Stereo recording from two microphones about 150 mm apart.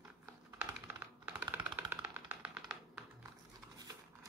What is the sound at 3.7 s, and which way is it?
Crumpling, 25° right (ahead or behind).